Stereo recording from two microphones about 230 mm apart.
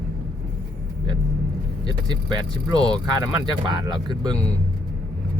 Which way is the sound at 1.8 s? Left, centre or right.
Centre.